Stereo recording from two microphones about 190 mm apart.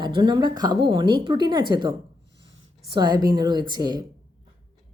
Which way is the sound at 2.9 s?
20° right (ahead or behind).